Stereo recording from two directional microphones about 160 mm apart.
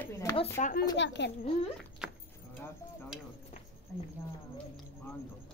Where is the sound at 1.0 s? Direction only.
90° left.